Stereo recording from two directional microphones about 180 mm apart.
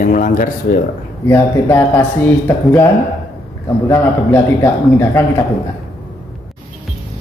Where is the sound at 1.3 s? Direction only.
15° left (ahead or behind).